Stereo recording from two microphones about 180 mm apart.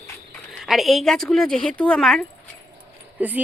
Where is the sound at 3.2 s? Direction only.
10° right (ahead or behind).